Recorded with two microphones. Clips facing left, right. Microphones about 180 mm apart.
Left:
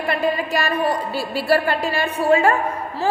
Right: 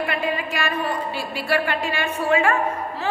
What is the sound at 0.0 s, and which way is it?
A woman's voice, 40° left (ahead or behind).